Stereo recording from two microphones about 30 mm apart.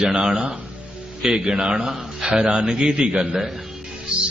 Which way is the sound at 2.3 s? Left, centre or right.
Right.